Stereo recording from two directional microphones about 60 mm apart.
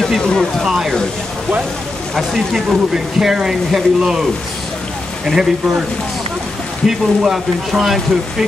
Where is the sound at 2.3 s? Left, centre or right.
Centre.